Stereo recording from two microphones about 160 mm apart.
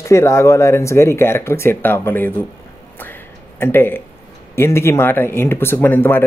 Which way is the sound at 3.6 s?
15° left (ahead or behind).